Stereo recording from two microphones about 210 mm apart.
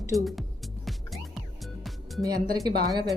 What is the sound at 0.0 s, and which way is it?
Speech, 15° right (ahead or behind).